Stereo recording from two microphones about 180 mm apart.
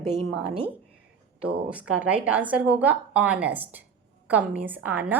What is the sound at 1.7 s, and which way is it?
A woman's voice, 5° right (ahead or behind).